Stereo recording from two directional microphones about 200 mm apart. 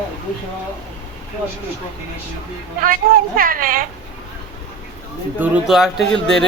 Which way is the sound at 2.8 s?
45° right (ahead or behind).